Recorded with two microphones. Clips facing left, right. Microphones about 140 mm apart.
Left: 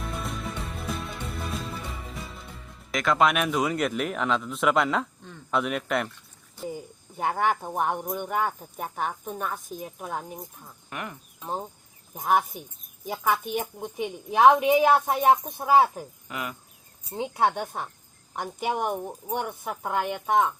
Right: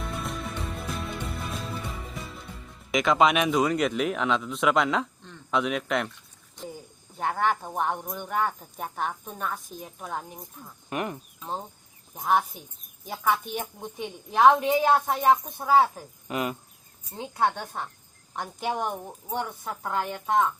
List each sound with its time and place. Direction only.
0.0 s music: centre (ahead or behind)
3.1 s speech: centre (ahead or behind)
7.2 s speech: 10° left (ahead or behind)
10.8 s speech: 20° right (ahead or behind)
12.2 s speech: 5° left (ahead or behind)
13.5 s speech: 10° left (ahead or behind)
16.3 s cricket: 25° right (ahead or behind)
17.1 s speech: 15° left (ahead or behind)